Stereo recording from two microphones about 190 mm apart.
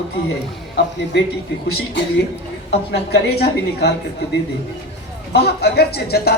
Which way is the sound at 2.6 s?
60° left (ahead or behind).